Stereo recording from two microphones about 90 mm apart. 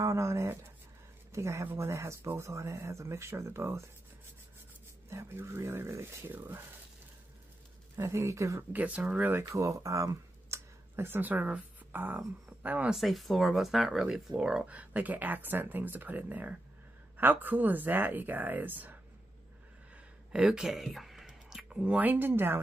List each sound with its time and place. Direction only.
0.0 s speech: 35° right (ahead or behind)
5.1 s speech: 30° right (ahead or behind)
7.9 s speech: 35° right (ahead or behind)
8.7 s speech: 15° right (ahead or behind)
9.4 s speech: 35° right (ahead or behind); by 12.9 s 15° right (ahead or behind)
12.9 s speech: centre (ahead or behind); by 18.9 s 20° right (ahead or behind)
20.3 s speech: 5° right (ahead or behind); by 22.6 s 25° right (ahead or behind)